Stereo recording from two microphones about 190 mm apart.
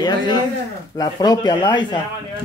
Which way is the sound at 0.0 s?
20° left (ahead or behind).